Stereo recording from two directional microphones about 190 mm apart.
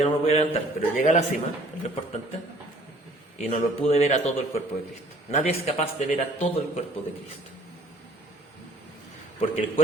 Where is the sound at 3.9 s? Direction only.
35° left (ahead or behind).